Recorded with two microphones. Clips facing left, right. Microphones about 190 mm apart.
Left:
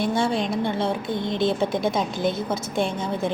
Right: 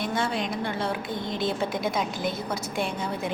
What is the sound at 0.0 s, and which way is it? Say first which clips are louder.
A woman's voice: left 5 dB; 30° left (ahead or behind).